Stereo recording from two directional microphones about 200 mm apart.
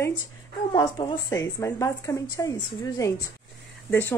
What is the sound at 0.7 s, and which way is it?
Speech, 20° left (ahead or behind).